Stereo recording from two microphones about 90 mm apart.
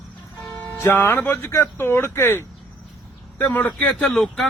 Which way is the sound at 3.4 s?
15° left (ahead or behind).